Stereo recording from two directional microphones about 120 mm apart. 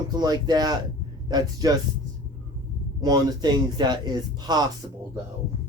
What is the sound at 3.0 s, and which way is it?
Speech, 35° right (ahead or behind).